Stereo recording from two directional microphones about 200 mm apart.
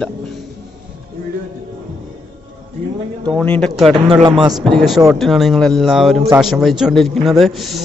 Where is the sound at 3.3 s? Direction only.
5° left (ahead or behind).